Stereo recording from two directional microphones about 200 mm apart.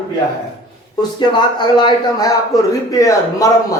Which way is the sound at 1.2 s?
20° left (ahead or behind).